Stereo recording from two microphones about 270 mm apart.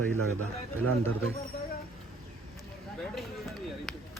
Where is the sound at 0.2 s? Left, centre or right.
Right.